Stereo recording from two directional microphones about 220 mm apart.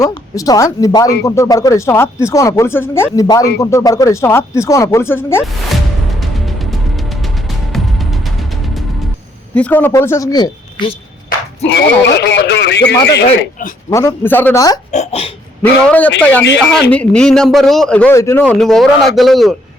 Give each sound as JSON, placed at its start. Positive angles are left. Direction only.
{"t": 0.0, "sound": "speech", "side_deg": 15}
{"t": 5.6, "sound": "music", "side_deg": 0}
{"t": 9.6, "sound": "speech", "side_deg": 5}
{"t": 12.2, "sound": "speech", "side_deg": 50}
{"t": 13.9, "sound": "speech", "side_deg": 15}
{"t": 14.9, "sound": "a sound", "side_deg": 30}
{"t": 15.6, "sound": "speech", "side_deg": 5}
{"t": 16.4, "sound": "speech", "side_deg": 50}
{"t": 16.9, "sound": "a man's voice", "side_deg": 5}